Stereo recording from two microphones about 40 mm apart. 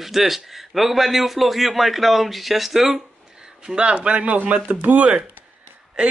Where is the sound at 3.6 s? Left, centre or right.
Right.